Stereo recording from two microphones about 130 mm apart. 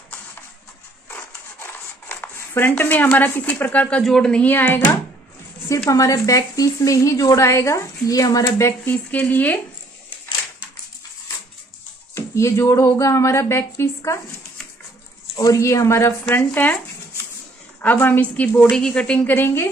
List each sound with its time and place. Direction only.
1.1 s a sound: 15° left (ahead or behind)
4.0 s a woman's voice: 5° left (ahead or behind)
5.9 s speech: 25° left (ahead or behind)
12.1 s speech: 20° left (ahead or behind)
15.3 s speech: 25° left (ahead or behind)
17.8 s a woman's voice: 15° left (ahead or behind)